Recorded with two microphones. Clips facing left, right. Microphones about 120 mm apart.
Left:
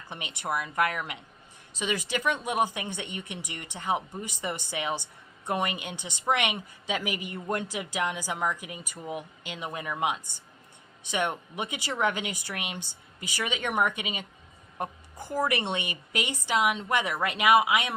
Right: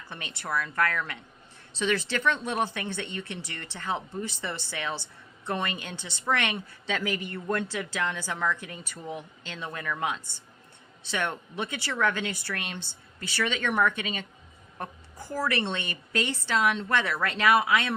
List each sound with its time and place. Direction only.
0.1 s a woman's voice: 15° left (ahead or behind)